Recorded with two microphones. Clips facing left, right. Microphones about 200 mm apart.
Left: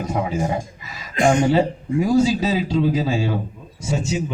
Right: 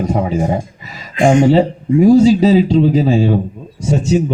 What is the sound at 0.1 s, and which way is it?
Speech, 25° right (ahead or behind).